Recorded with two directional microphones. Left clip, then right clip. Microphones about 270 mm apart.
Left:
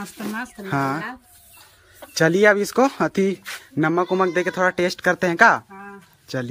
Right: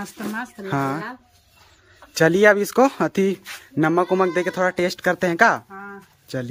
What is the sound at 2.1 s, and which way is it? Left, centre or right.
Speech, centre.